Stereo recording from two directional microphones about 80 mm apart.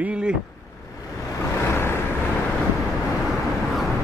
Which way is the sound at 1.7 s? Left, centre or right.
Left.